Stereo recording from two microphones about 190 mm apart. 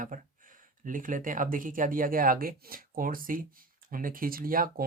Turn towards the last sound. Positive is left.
turn(degrees=-50)  # may be behind; listen again after turning